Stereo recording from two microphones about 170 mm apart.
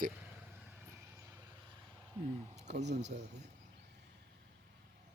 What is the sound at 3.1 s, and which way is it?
Speech, 55° right (ahead or behind).